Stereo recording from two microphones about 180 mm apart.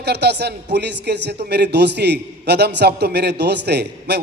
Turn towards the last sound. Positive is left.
turn(degrees=-65)  # may be behind; listen again after turning